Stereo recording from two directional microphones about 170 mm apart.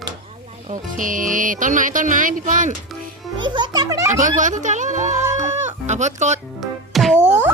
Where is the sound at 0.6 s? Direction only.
50° right (ahead or behind).